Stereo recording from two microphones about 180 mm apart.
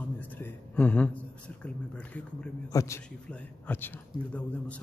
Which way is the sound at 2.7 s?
15° left (ahead or behind).